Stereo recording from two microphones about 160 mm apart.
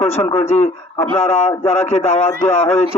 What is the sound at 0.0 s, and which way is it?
A man's voice, 40° left (ahead or behind).